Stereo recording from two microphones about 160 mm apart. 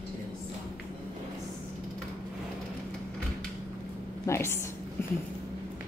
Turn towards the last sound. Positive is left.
turn(degrees=15)  # may be behind; listen again after turning